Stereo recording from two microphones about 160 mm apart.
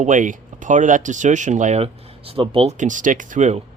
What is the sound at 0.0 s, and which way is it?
Speech, 50° right (ahead or behind).